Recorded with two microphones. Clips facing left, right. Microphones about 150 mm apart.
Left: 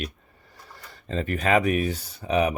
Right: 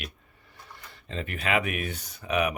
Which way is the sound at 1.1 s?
40° left (ahead or behind).